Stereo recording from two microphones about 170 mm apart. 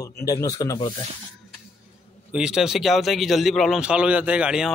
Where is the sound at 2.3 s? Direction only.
5° right (ahead or behind).